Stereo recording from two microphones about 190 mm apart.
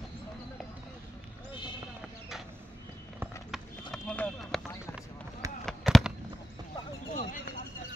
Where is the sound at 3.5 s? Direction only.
5° left (ahead or behind).